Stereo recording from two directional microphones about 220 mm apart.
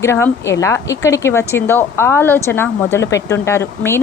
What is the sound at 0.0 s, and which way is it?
A woman's voice, 10° left (ahead or behind).